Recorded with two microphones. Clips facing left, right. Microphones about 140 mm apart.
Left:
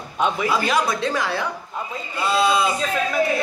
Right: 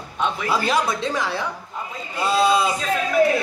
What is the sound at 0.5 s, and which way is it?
Speech, 30° right (ahead or behind).